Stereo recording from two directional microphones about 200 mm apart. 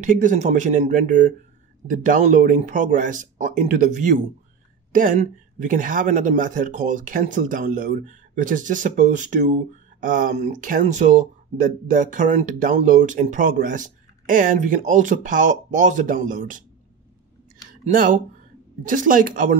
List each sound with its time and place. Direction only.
0.0 s speech: 40° right (ahead or behind)
17.8 s speech: 45° right (ahead or behind)